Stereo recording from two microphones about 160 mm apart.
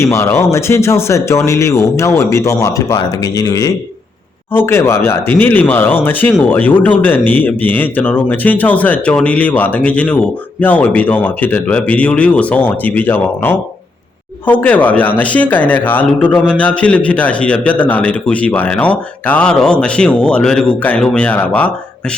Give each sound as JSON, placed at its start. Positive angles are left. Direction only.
{"t": 0.0, "sound": "a man's voice", "side_deg": 15}